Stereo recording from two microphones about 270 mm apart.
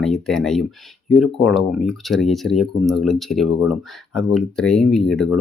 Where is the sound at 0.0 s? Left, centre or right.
Centre.